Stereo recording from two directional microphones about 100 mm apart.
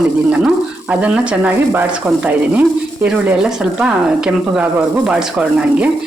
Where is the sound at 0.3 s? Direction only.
10° right (ahead or behind).